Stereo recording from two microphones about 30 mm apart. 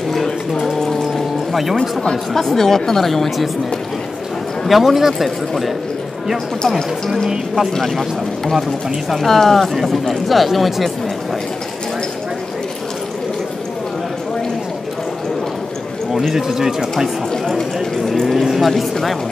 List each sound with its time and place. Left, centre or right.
1.1 s music: centre
2.3 s speech: centre
4.6 s speech: centre
7.2 s speech: centre
7.8 s speech: centre
16.1 s a sound: centre
16.3 s speech: centre
17.9 s speech: centre
18.2 s speech: centre